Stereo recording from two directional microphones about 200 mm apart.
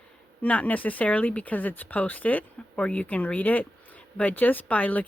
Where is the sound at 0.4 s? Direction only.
5° left (ahead or behind).